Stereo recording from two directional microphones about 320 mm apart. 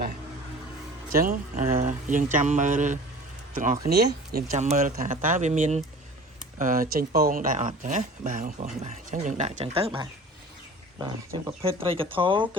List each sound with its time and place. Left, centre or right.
1.1 s speech: right
10.9 s speech: centre